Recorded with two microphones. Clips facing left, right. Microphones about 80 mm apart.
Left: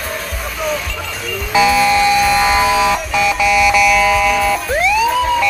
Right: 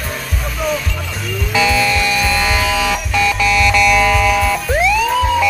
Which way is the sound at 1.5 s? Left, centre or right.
Centre.